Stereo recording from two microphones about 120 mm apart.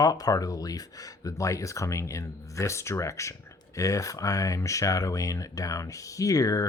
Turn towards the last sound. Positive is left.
turn(degrees=30)  # may be behind; listen again after turning